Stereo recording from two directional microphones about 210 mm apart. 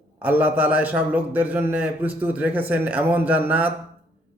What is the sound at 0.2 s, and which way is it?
A man's voice, 5° right (ahead or behind).